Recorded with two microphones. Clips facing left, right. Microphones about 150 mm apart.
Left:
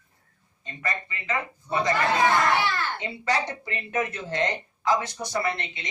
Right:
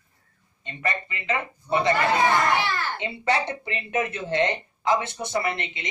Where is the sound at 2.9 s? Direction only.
20° right (ahead or behind).